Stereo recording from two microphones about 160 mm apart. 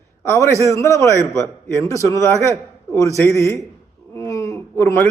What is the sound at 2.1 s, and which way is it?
Speech, 20° right (ahead or behind).